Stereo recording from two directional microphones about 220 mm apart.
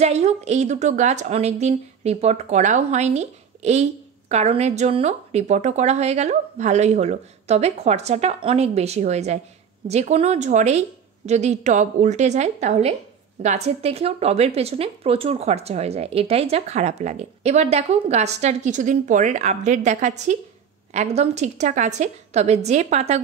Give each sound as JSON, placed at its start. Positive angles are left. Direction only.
{"t": 0.0, "sound": "speech", "side_deg": -30}